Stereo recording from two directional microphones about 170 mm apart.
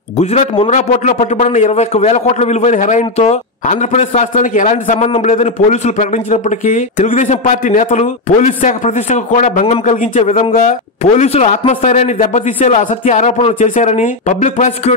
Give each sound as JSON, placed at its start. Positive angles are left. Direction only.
{"t": 0.2, "sound": "a man's voice", "side_deg": 40}